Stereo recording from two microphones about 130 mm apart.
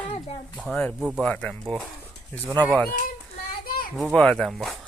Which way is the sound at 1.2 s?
10° left (ahead or behind).